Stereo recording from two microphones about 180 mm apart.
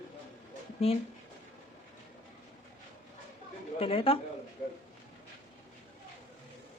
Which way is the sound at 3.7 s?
30° left (ahead or behind).